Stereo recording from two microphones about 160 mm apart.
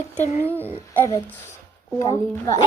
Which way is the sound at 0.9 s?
15° left (ahead or behind).